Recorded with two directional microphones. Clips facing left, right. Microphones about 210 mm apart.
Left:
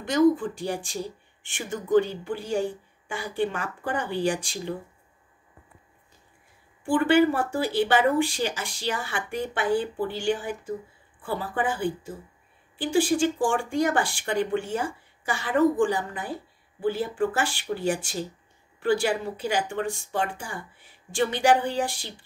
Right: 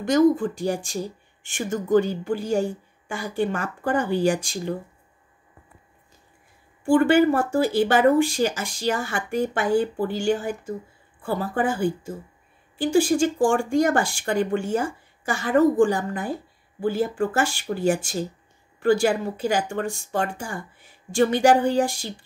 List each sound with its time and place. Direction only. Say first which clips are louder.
0.0 s speech: right 3 dB; 45° right (ahead or behind)
6.9 s speech: right 3 dB; 45° right (ahead or behind)